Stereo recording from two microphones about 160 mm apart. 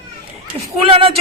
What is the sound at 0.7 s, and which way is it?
Speech, 35° right (ahead or behind).